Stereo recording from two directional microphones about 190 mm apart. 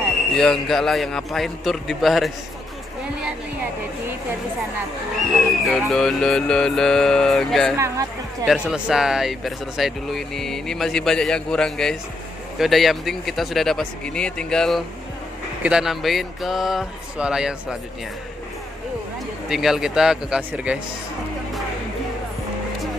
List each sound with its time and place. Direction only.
0.3 s speech: 5° left (ahead or behind)
5.7 s speech: centre (ahead or behind)
7.7 s speech: 15° right (ahead or behind)
8.5 s speech: 5° right (ahead or behind)
19.5 s speech: centre (ahead or behind)